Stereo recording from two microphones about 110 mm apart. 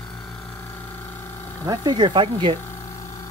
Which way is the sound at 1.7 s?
40° right (ahead or behind).